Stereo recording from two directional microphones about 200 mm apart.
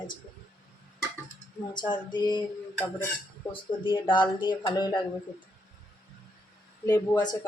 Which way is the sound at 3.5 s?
25° left (ahead or behind).